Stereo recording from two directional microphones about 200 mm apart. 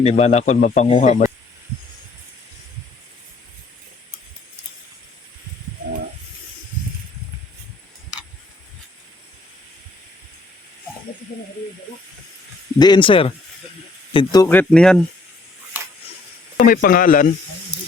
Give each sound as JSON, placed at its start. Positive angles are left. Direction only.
{"t": 0.0, "sound": "speech", "side_deg": 35}
{"t": 12.8, "sound": "speech", "side_deg": 25}
{"t": 16.6, "sound": "speech", "side_deg": 45}